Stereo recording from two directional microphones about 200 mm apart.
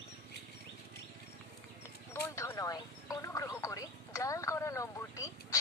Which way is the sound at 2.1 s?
15° left (ahead or behind).